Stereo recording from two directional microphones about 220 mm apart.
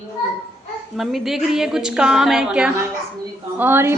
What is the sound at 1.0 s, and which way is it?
A woman's voice, centre (ahead or behind).